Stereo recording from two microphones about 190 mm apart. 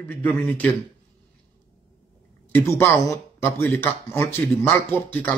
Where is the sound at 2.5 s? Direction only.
10° left (ahead or behind).